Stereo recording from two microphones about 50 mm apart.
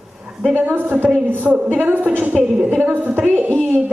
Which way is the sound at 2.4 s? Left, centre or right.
Centre.